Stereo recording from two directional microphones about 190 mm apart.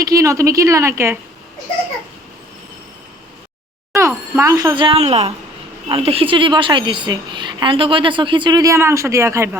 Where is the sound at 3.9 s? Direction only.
15° right (ahead or behind).